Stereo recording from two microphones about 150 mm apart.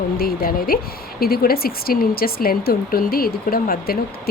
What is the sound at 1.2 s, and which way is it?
Speech, 90° left.